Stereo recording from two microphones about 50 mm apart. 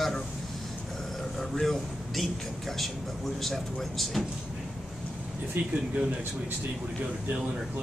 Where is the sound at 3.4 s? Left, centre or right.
Centre.